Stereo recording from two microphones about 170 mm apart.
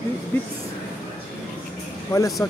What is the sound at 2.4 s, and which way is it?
Speech, 15° left (ahead or behind).